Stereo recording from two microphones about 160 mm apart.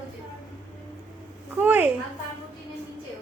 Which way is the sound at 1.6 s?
10° right (ahead or behind).